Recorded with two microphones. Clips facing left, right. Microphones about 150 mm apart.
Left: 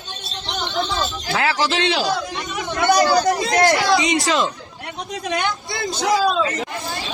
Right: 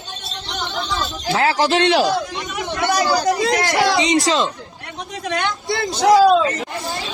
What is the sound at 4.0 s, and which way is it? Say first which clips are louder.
Speech: right 2 dB; 35° right (ahead or behind).